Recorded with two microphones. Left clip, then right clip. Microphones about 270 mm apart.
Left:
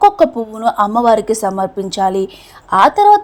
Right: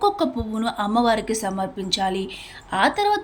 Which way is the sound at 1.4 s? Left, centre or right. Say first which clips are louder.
Left 9 dB; left.